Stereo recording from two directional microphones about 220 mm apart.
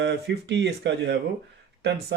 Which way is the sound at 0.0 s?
55° right (ahead or behind).